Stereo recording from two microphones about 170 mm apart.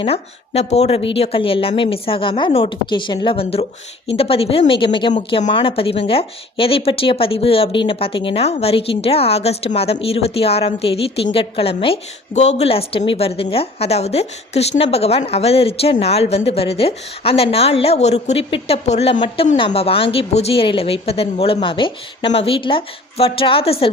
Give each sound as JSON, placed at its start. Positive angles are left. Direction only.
{"t": 0.0, "sound": "speech", "side_deg": 35}